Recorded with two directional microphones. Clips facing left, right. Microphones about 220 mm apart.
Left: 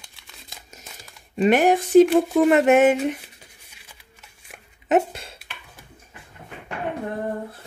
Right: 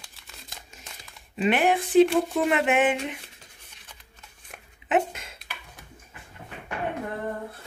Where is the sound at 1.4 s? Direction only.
45° left (ahead or behind).